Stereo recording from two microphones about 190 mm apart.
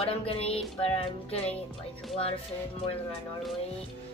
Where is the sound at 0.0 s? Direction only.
30° left (ahead or behind).